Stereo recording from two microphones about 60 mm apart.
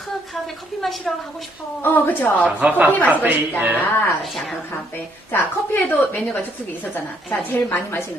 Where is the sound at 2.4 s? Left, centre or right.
Right.